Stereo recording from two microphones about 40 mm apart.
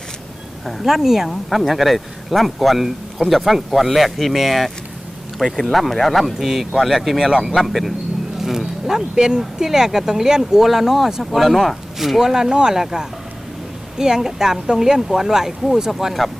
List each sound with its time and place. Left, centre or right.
0.6 s speech: centre
0.9 s speech: centre